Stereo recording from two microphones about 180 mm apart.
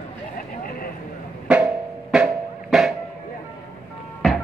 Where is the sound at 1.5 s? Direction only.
5° right (ahead or behind).